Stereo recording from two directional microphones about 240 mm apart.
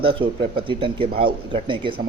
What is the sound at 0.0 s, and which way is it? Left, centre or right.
Speech, right.